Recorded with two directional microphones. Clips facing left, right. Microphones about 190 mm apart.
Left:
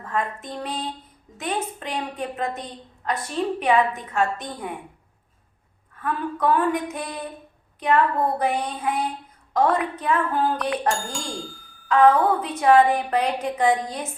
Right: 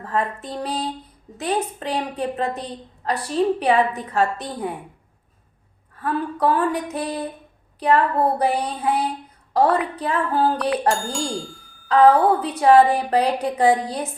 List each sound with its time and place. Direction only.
0.0 s a woman's voice: 35° right (ahead or behind)
6.0 s a woman's voice: 35° right (ahead or behind)
10.6 s speech: centre (ahead or behind)
11.9 s a woman's voice: 35° right (ahead or behind)